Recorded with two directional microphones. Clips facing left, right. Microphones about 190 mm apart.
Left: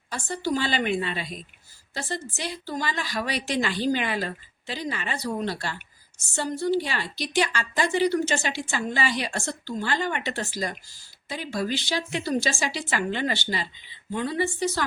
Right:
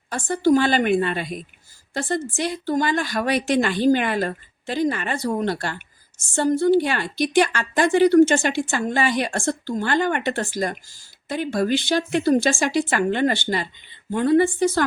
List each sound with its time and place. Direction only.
0.1 s speech: 50° right (ahead or behind)